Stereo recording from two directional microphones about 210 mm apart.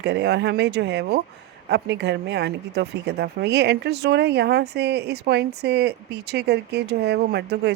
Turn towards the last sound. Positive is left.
turn(degrees=-50)  # may be behind; listen again after turning